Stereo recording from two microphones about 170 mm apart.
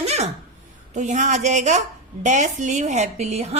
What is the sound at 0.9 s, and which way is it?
A woman's voice, 45° right (ahead or behind).